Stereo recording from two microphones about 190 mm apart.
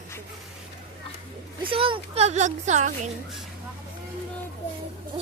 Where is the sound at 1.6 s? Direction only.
30° right (ahead or behind).